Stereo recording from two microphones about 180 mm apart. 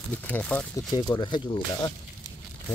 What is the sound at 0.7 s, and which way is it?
Speech, 20° left (ahead or behind).